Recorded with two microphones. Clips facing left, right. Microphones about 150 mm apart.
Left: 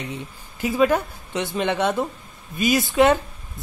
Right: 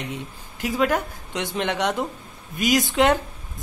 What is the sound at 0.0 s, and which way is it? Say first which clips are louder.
A woman's voice: even; 10° right (ahead or behind).